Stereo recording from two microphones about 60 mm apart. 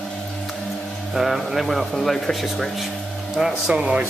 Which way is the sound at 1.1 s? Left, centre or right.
Centre.